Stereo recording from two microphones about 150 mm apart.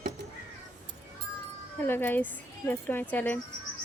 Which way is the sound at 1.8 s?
15° left (ahead or behind).